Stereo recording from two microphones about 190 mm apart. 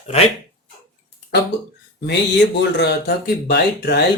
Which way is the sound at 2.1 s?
65° left (ahead or behind).